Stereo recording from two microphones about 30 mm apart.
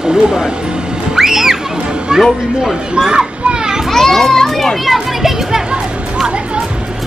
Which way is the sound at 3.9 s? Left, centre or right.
Centre.